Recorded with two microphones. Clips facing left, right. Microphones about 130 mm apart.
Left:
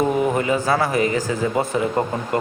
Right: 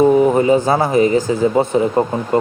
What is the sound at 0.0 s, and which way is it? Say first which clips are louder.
Speech: right 8 dB; 25° right (ahead or behind).